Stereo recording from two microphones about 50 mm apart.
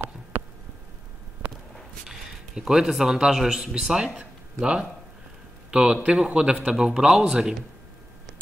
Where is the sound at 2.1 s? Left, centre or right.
Centre.